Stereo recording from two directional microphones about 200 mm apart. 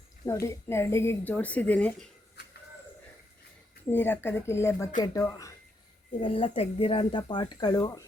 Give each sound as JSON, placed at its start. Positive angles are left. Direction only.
{"t": 0.3, "sound": "a woman's voice", "side_deg": 15}
{"t": 3.8, "sound": "a woman's voice", "side_deg": 10}
{"t": 6.1, "sound": "speech", "side_deg": 25}